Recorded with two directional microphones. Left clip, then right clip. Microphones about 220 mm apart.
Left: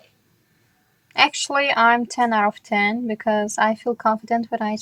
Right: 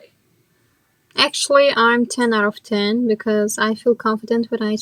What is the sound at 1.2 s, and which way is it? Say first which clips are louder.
Speech: right 4 dB; centre (ahead or behind).